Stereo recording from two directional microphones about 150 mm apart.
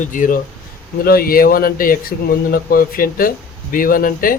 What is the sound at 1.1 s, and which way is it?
Speech, 80° left.